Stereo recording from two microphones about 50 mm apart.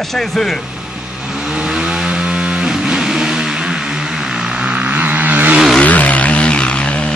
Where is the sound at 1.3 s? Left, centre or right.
Centre.